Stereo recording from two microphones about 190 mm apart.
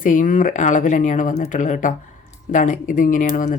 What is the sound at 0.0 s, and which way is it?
Speech, 45° left (ahead or behind).